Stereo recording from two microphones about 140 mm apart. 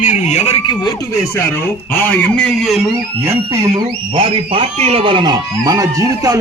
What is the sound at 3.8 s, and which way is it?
Speech, 40° right (ahead or behind).